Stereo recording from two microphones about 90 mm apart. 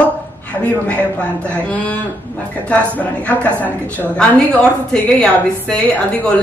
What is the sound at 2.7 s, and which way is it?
A woman's voice, 15° left (ahead or behind).